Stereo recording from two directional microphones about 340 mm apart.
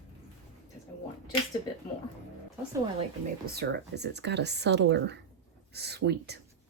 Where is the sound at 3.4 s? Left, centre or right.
Right.